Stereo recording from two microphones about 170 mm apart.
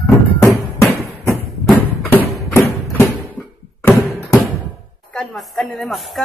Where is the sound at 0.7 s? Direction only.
15° left (ahead or behind).